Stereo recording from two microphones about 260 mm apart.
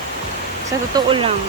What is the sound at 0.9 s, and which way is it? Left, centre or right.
Speech, centre.